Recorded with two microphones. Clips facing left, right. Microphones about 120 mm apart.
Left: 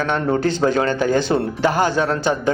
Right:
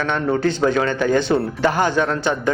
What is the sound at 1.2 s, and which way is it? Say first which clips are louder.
Speech: even; 10° left (ahead or behind).